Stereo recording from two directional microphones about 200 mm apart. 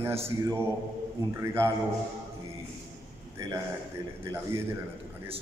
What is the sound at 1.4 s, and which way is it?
Speech, 15° right (ahead or behind).